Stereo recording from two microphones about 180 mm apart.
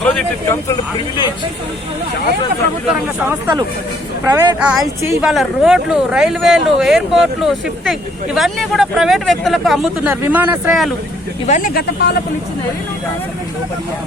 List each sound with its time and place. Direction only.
0.0 s speech: 5° left (ahead or behind)
4.3 s speech: 20° right (ahead or behind)
4.6 s speech: centre (ahead or behind)
11.4 s speech: 45° left (ahead or behind); by 12.2 s 60° left (ahead or behind)